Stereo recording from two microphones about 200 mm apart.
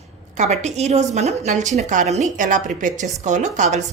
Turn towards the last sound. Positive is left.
turn(degrees=-35)  # may be behind; listen again after turning